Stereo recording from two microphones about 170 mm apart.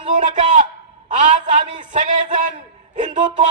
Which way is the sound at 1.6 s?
30° right (ahead or behind).